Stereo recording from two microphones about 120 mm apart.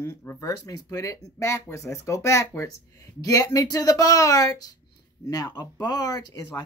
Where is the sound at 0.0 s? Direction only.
20° left (ahead or behind).